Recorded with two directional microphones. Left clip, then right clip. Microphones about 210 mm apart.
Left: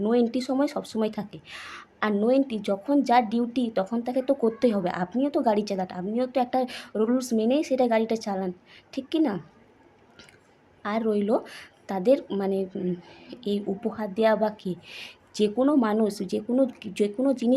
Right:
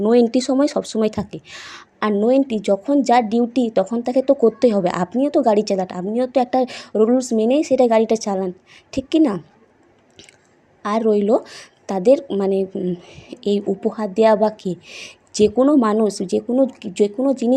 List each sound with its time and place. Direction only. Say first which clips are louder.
0.0 s speech: right 9 dB; 25° right (ahead or behind)
10.8 s speech: right 9 dB; 25° right (ahead or behind)